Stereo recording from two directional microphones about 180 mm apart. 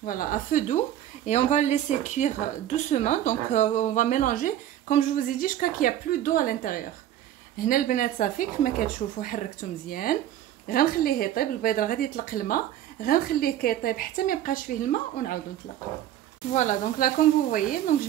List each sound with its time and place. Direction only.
0.0 s speech: 50° left (ahead or behind)
16.5 s speech: 45° left (ahead or behind)